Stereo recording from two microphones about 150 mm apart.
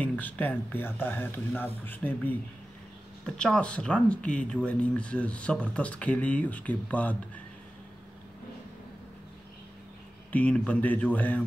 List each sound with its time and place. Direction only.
0.0 s speech: 10° left (ahead or behind)
10.3 s speech: 10° left (ahead or behind)